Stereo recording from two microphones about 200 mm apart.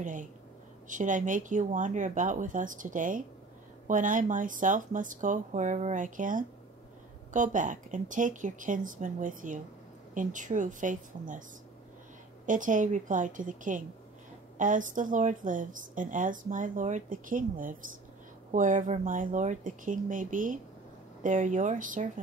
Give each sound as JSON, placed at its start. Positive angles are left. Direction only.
{"t": 0.0, "sound": "a woman's voice", "side_deg": -40}
{"t": 12.4, "sound": "a woman's voice", "side_deg": -40}